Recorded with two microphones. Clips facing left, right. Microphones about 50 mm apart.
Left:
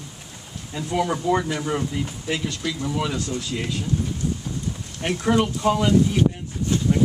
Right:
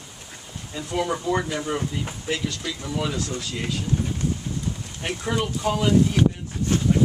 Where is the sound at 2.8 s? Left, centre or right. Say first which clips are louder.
Left 2 dB; centre.